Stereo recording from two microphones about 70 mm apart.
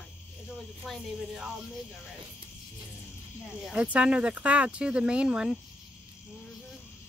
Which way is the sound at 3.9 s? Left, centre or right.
Centre.